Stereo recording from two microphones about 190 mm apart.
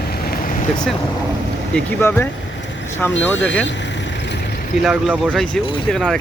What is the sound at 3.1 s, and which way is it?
Speech, 75° left (ahead or behind).